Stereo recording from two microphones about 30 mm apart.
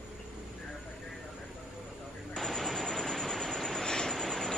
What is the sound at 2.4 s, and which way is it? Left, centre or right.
Vehicle, centre.